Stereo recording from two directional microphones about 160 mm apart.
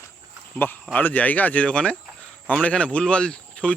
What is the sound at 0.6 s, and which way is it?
Speech, 15° left (ahead or behind).